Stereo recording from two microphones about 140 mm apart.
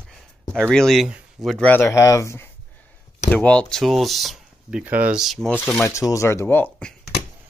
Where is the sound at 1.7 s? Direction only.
15° left (ahead or behind).